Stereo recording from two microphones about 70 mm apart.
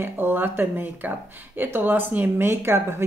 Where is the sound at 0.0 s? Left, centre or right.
Right.